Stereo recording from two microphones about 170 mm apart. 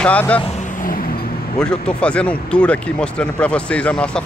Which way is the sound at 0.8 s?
55° left (ahead or behind).